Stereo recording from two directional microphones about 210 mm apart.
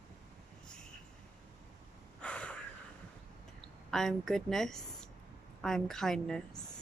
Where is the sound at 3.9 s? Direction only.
Centre (ahead or behind).